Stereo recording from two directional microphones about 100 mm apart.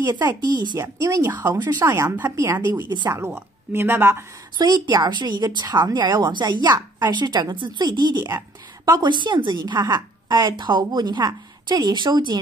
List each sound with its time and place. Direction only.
0.4 s a woman's voice: 45° right (ahead or behind)
0.7 s a woman's voice: 30° right (ahead or behind)
4.6 s a woman's voice: 45° right (ahead or behind)